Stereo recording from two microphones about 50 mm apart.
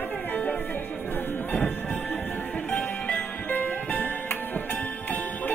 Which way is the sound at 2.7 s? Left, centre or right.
Left.